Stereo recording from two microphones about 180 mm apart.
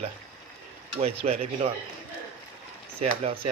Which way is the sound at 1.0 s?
35° right (ahead or behind).